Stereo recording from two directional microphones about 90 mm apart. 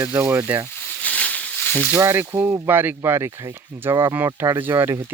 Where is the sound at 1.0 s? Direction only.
15° left (ahead or behind).